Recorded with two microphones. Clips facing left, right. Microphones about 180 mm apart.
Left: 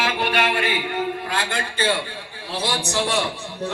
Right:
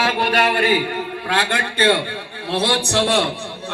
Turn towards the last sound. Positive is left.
turn(degrees=-65)  # may be behind; listen again after turning